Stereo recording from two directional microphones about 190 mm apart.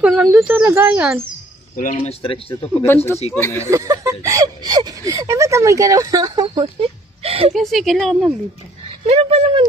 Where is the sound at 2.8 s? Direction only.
10° left (ahead or behind).